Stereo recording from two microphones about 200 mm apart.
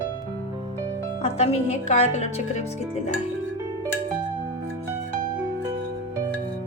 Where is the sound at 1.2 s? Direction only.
30° left (ahead or behind).